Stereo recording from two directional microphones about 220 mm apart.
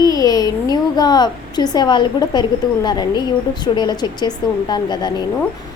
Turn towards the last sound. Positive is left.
turn(degrees=20)  # may be behind; listen again after turning